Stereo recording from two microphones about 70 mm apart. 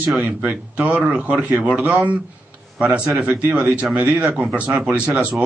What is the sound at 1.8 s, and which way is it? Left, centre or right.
Speech, centre.